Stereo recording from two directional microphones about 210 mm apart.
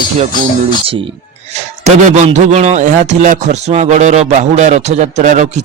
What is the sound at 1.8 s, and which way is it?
A man's voice, 35° right (ahead or behind).